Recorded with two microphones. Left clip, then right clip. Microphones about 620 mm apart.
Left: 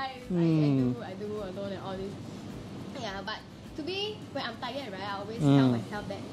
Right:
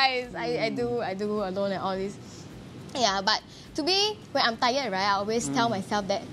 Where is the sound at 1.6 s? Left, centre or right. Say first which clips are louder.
Right 9 dB; right.